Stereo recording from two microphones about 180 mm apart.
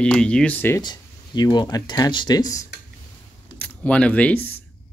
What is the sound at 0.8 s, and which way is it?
Speech, 25° left (ahead or behind).